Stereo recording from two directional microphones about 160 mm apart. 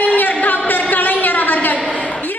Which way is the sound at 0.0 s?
10° left (ahead or behind).